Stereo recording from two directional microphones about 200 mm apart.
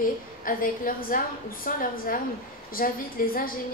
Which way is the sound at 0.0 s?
45° left (ahead or behind).